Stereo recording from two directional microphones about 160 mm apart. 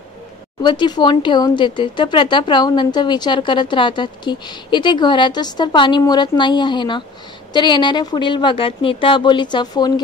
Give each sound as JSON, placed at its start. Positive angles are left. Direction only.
{"t": 0.6, "sound": "speech", "side_deg": 25}